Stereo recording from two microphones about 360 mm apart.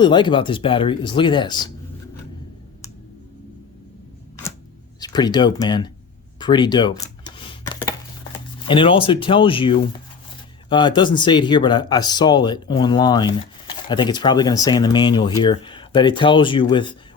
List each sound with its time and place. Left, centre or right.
0.0 s speech: centre
4.9 s speech: centre
6.4 s a sound: centre
8.6 s speech: centre